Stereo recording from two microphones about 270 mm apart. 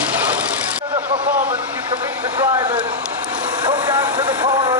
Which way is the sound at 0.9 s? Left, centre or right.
Centre.